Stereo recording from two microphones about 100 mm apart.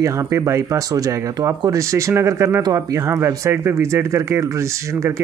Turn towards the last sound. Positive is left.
turn(degrees=-30)  # may be behind; listen again after turning